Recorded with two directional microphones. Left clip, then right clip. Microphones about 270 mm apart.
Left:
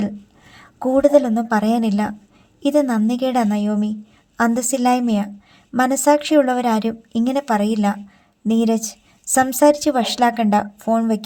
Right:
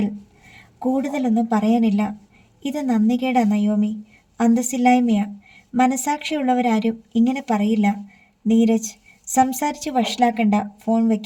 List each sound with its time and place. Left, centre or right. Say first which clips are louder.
0.8 s speech: left 9 dB; left